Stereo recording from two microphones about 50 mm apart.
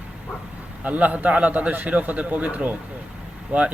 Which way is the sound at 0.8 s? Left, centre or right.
Right.